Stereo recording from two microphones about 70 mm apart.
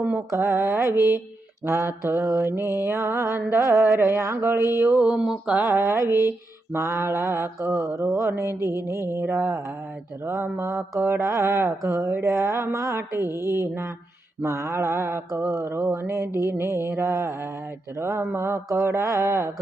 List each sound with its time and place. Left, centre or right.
0.3 s mantra: right
5.1 s a sound: centre
5.5 s mantra: right
10.6 s mantra: right
18.0 s speech: right
18.3 s mantra: right